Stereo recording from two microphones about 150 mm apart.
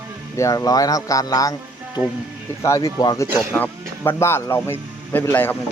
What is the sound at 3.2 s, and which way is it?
Speech, 15° right (ahead or behind).